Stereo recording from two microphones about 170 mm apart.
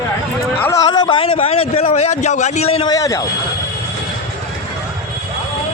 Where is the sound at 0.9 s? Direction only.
25° left (ahead or behind).